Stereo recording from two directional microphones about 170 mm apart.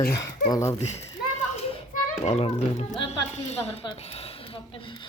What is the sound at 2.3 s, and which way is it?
Speech, 40° left (ahead or behind).